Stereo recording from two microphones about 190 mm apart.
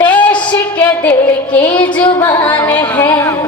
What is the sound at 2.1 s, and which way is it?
Music, 25° left (ahead or behind).